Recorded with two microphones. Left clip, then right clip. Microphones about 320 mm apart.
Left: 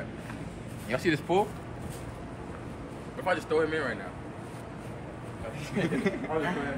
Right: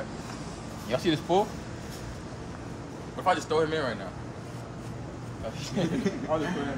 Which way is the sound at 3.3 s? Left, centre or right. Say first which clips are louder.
Right 2 dB; centre.